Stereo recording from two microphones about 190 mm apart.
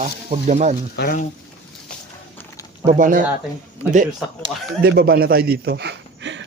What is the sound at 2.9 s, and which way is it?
Speech, 45° right (ahead or behind).